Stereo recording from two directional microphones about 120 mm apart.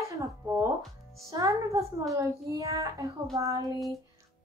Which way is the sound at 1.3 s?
30° right (ahead or behind).